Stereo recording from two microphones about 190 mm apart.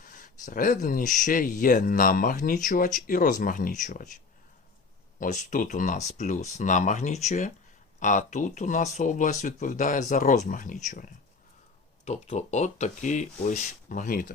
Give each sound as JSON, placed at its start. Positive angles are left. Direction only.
{"t": 0.0, "sound": "speech", "side_deg": 45}
{"t": 5.2, "sound": "speech", "side_deg": 40}